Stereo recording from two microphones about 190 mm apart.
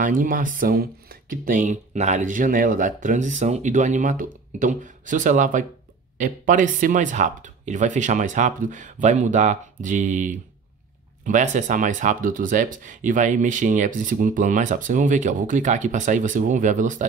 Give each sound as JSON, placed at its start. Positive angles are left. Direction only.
{"t": 0.0, "sound": "speech", "side_deg": -45}